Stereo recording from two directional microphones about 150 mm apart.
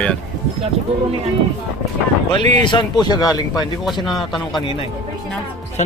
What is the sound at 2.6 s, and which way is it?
Speech, 30° left (ahead or behind).